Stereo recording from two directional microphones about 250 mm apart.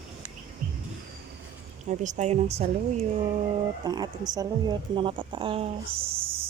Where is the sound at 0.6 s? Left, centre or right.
Right.